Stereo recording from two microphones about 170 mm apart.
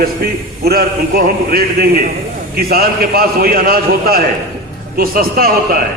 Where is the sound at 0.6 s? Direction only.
60° right (ahead or behind).